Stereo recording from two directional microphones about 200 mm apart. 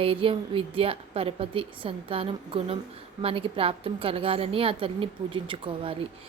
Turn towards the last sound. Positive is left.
turn(degrees=-25)  # may be behind; listen again after turning